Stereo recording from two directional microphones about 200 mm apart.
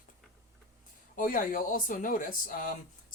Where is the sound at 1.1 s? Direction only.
45° left (ahead or behind).